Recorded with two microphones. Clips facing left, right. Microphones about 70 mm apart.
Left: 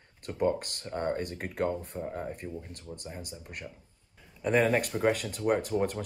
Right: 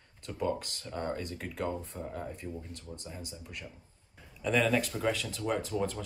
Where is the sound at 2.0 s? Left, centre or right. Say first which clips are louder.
Left 4 dB; left.